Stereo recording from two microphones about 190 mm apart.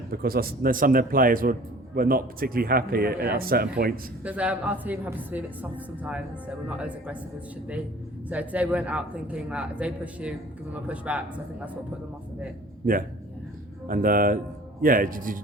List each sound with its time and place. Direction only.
0.1 s a man's voice: 50° right (ahead or behind)
4.2 s a man's voice: 5° right (ahead or behind)
8.3 s a man's voice: 10° right (ahead or behind)
12.8 s a man's voice: 45° right (ahead or behind)